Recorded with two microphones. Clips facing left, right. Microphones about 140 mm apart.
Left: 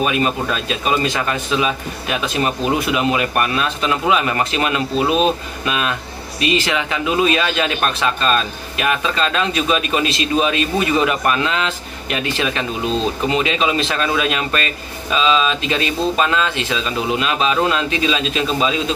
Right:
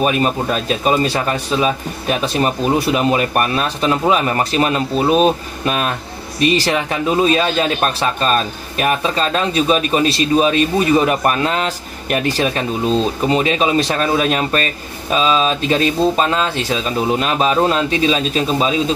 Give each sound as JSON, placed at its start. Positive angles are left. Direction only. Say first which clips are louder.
{"t": 0.0, "sound": "a man's voice", "louder": "right 2 dB", "side_deg": -40}